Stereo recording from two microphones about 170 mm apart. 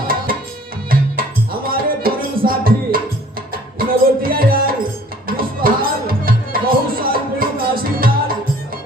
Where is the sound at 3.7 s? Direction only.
60° right (ahead or behind).